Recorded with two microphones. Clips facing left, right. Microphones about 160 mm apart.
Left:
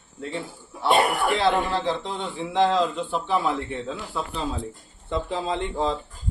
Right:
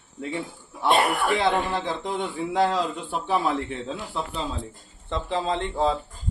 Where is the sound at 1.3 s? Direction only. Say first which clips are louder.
Left 1 dB; 20° right (ahead or behind).